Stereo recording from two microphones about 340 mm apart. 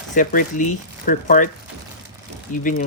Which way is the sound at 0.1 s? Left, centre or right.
Left.